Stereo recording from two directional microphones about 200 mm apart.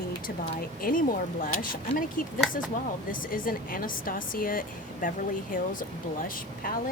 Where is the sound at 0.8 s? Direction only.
45° left (ahead or behind).